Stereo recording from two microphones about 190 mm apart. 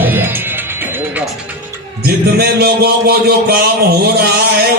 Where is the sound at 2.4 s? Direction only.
55° right (ahead or behind).